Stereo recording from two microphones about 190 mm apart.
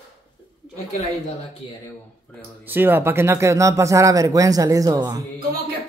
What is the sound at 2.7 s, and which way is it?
Speech, 10° right (ahead or behind).